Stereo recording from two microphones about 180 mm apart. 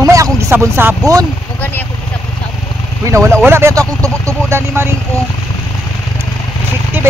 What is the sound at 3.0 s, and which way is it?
Speech, 15° right (ahead or behind).